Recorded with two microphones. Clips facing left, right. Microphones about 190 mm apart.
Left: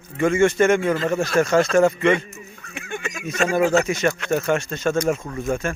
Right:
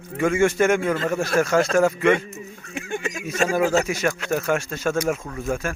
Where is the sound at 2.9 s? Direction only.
35° right (ahead or behind).